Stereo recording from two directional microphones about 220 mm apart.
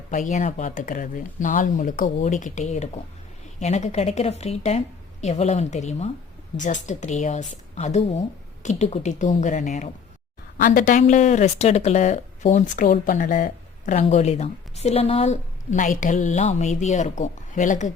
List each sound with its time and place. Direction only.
0.1 s speech: 35° left (ahead or behind)